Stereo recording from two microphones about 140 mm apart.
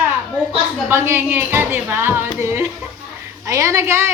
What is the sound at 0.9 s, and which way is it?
A woman's voice, 15° right (ahead or behind).